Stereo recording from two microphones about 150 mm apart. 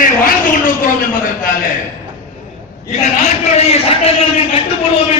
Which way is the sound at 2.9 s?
50° left (ahead or behind).